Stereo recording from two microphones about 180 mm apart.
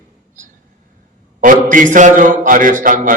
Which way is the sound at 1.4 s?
45° right (ahead or behind).